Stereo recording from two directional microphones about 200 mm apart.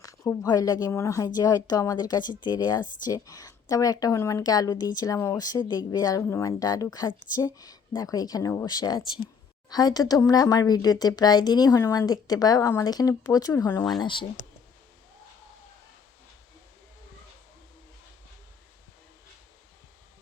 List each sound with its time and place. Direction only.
0.0 s speech: 15° left (ahead or behind)
14.0 s speech: 25° left (ahead or behind)